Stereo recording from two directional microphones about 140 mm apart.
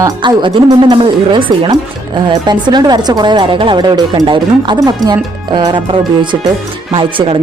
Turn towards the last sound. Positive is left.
turn(degrees=-40)  # may be behind; listen again after turning